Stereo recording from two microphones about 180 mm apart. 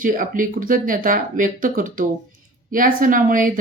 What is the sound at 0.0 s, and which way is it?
Speech, 50° right (ahead or behind).